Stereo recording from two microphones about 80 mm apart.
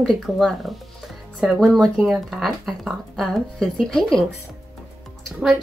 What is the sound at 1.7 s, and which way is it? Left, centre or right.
Speech, centre.